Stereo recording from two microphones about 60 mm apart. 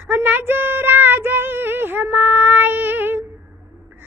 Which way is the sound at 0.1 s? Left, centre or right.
Right.